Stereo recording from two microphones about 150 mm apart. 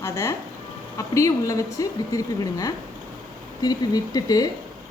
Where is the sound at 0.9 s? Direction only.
20° left (ahead or behind).